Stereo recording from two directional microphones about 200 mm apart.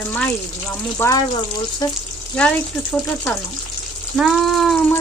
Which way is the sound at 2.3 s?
5° left (ahead or behind).